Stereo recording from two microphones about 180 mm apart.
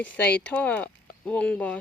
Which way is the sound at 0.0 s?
10° left (ahead or behind).